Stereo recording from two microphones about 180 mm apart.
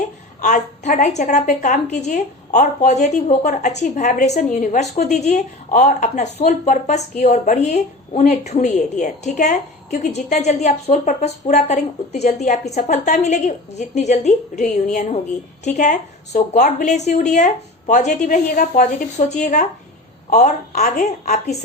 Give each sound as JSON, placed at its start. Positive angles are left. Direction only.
{"t": 0.4, "sound": "a woman's voice", "side_deg": 45}